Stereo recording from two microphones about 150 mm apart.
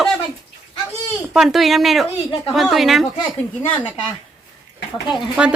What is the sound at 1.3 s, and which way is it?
Speech, centre (ahead or behind).